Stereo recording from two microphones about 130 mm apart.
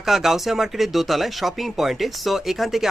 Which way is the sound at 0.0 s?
Centre (ahead or behind).